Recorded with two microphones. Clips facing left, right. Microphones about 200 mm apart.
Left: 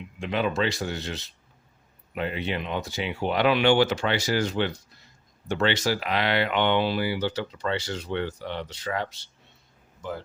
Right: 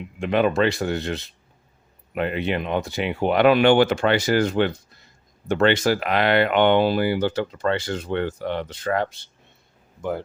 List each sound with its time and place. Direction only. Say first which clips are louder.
0.2 s speech: right 6 dB; 55° right (ahead or behind)